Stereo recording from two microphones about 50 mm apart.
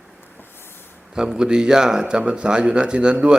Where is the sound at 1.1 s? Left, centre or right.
Centre.